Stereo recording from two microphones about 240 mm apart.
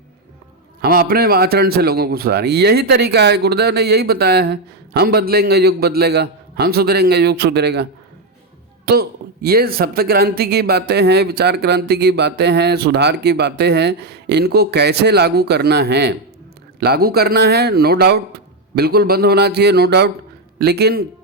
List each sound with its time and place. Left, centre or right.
0.8 s a man's voice: right
8.9 s a man's voice: right